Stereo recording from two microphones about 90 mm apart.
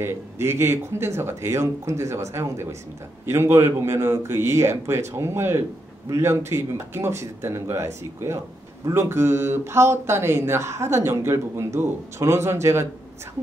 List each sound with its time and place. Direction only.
0.0 s a man's voice: 30° right (ahead or behind)